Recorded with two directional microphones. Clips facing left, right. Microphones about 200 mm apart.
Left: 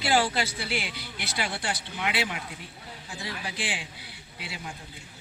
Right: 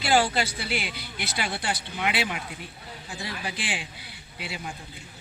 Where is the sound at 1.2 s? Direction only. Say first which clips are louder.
Right 1 dB; centre (ahead or behind).